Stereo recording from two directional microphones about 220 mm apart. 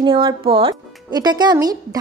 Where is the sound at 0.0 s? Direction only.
20° right (ahead or behind).